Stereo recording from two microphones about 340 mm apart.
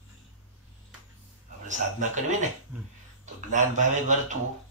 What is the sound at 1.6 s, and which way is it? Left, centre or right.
Speech, right.